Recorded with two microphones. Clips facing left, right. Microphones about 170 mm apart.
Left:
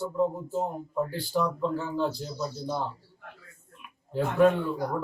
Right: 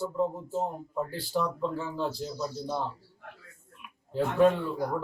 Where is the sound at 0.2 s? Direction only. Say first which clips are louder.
Left 3 dB; centre (ahead or behind).